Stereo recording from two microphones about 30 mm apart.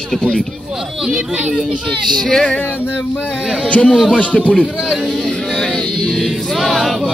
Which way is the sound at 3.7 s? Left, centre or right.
Left.